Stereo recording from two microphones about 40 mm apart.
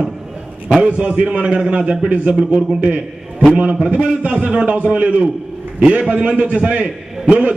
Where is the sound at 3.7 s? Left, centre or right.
Right.